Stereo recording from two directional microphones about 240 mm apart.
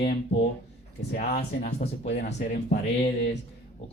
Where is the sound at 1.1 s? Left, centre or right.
Left.